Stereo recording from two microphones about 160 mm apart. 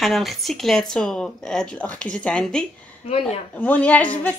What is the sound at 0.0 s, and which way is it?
A woman's voice, centre (ahead or behind).